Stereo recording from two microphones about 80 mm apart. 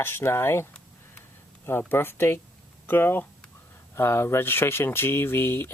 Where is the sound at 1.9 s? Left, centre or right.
Left.